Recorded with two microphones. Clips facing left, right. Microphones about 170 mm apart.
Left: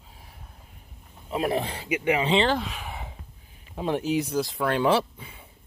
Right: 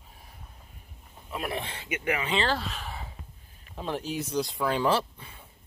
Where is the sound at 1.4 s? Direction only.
35° left (ahead or behind).